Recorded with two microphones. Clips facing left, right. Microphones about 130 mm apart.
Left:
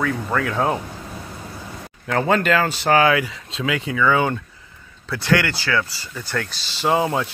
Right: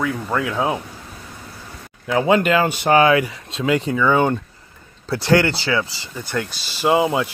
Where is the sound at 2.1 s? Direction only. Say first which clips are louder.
Right 2 dB; 10° right (ahead or behind); by 3.7 s 30° right (ahead or behind).